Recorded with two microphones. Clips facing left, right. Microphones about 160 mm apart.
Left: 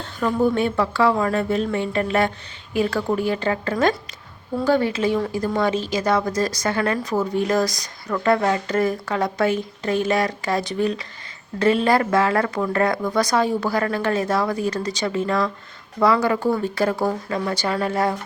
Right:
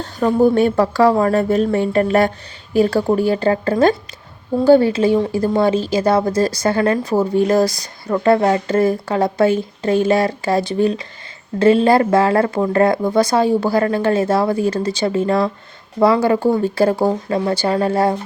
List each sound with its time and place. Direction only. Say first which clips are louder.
0.0 s a woman's voice: right 6 dB; 40° right (ahead or behind)